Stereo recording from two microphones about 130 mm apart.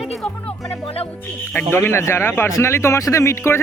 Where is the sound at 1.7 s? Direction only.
20° left (ahead or behind).